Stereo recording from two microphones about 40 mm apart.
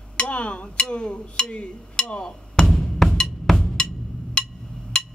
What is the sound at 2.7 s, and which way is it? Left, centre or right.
Music, centre.